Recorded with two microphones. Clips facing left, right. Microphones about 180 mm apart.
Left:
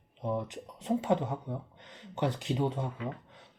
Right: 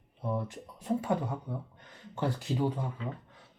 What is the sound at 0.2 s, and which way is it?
Speech, 20° left (ahead or behind).